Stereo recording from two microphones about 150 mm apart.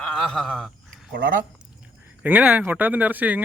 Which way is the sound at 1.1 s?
70° right (ahead or behind).